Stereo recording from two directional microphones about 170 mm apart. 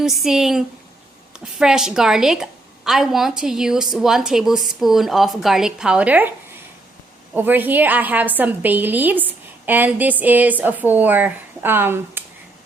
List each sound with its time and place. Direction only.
0.0 s a woman's voice: centre (ahead or behind)
7.3 s a woman's voice: 10° right (ahead or behind)